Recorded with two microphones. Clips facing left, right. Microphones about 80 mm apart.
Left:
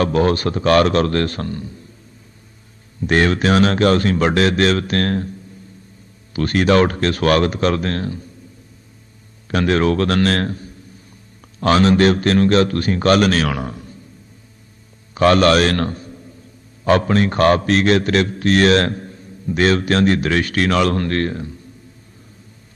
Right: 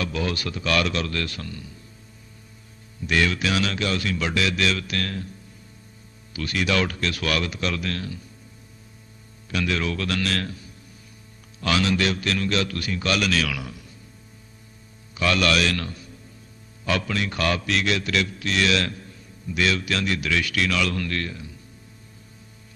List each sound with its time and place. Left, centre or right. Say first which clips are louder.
0.0 s a man's voice: left 11 dB; left
3.0 s a man's voice: left 7 dB; left
6.3 s a man's voice: left 10 dB; left
9.5 s a man's voice: left 9 dB; left
15.1 s a man's voice: left 9 dB; left